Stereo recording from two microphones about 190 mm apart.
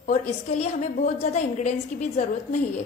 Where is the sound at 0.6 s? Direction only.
35° left (ahead or behind).